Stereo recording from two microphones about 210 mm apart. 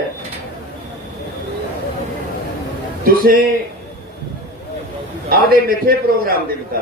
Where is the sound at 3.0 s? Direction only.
45° right (ahead or behind).